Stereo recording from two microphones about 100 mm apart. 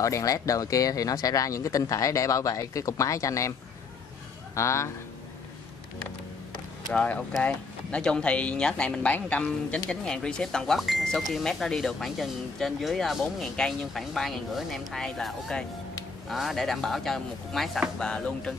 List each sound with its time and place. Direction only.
0.0 s speech: 35° left (ahead or behind)
4.6 s speech: 30° left (ahead or behind)
6.9 s speech: 10° left (ahead or behind)